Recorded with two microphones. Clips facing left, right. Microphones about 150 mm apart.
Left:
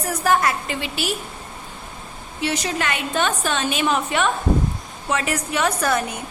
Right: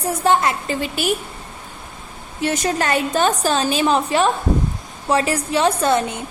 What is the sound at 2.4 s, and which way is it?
A woman's voice, 45° right (ahead or behind).